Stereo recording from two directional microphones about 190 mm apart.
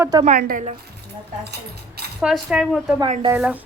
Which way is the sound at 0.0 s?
20° right (ahead or behind).